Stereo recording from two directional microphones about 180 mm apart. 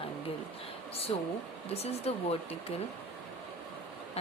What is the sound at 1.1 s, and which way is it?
Speech, 30° left (ahead or behind).